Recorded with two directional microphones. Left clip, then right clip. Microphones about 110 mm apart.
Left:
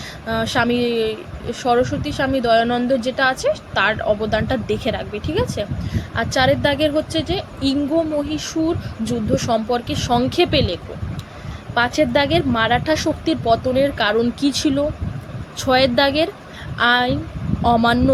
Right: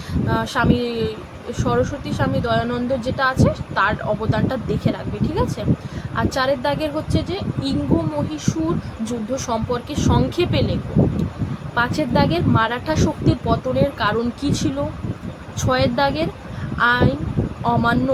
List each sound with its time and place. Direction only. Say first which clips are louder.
0.3 s speech: left 1 dB; 35° left (ahead or behind)
9.0 s a woman's voice: left 4 dB; 35° left (ahead or behind)